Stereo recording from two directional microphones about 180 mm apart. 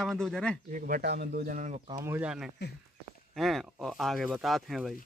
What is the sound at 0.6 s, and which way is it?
Speech, 50° right (ahead or behind).